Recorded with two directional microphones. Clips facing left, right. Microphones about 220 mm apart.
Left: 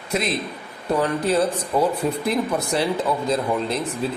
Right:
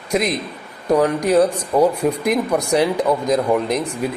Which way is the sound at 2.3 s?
15° right (ahead or behind).